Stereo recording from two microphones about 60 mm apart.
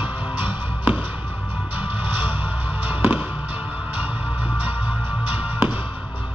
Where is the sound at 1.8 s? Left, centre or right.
Right.